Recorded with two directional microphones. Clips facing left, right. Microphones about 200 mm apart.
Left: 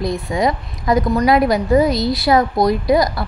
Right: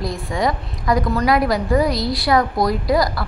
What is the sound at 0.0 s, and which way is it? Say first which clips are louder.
A woman's voice: left 3 dB; 20° left (ahead or behind).